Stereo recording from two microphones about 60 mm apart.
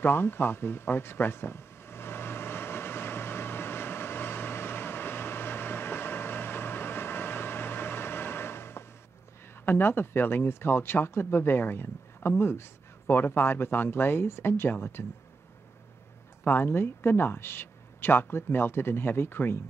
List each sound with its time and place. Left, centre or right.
0.0 s a sound: left
9.7 s speech: left
16.4 s speech: left